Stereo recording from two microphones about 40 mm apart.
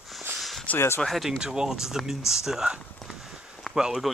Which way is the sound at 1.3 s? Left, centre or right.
Centre.